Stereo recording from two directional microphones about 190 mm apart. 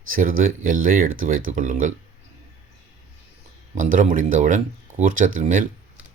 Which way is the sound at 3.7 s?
45° right (ahead or behind).